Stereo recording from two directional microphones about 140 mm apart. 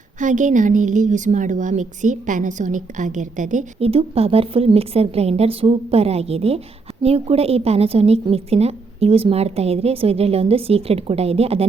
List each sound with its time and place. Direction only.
0.2 s a woman's voice: 65° right (ahead or behind)
3.8 s a woman's voice: 45° right (ahead or behind)